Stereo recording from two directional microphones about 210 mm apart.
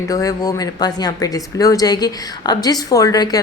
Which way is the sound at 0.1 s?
15° left (ahead or behind).